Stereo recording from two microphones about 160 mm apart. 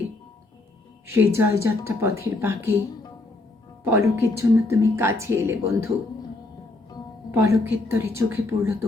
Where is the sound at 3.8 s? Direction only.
20° right (ahead or behind).